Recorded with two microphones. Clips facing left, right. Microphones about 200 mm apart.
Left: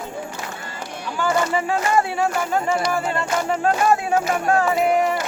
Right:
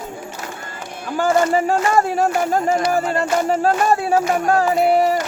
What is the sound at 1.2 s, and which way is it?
Speech, 40° right (ahead or behind).